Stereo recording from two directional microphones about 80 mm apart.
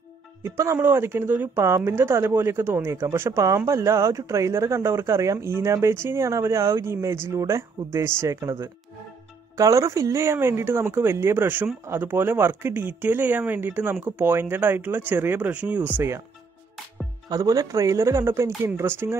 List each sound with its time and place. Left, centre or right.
0.4 s speech: right
17.3 s a man's voice: right